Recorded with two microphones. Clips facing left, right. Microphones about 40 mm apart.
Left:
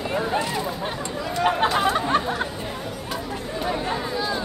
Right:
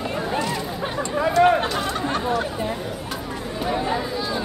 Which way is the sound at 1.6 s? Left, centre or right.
Left.